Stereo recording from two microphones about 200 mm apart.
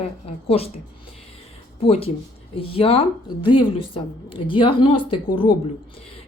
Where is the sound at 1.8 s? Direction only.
30° left (ahead or behind).